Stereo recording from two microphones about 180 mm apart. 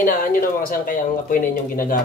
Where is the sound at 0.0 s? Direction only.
50° left (ahead or behind).